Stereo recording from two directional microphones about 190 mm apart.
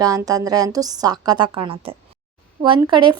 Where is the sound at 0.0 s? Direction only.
20° right (ahead or behind).